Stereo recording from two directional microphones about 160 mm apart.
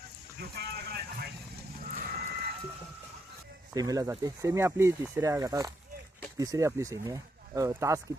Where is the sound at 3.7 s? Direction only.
20° right (ahead or behind).